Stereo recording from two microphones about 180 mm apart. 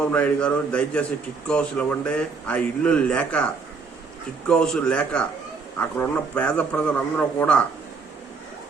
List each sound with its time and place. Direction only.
0.0 s a man's voice: 5° left (ahead or behind)